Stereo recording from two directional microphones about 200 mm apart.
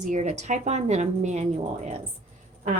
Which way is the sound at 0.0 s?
35° right (ahead or behind).